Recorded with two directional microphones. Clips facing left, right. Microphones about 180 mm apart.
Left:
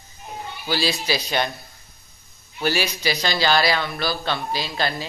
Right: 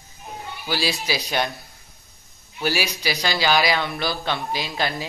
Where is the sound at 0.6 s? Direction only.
10° right (ahead or behind).